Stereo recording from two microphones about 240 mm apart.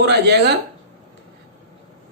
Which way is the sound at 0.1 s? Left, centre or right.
Right.